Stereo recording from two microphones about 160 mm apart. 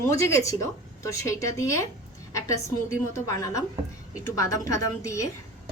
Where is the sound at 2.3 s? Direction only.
20° left (ahead or behind).